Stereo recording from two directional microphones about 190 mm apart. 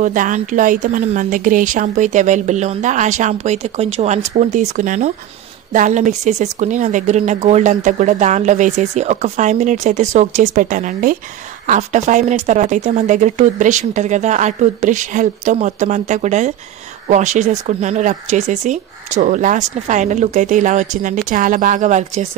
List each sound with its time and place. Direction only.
0.0 s a woman's voice: 45° right (ahead or behind)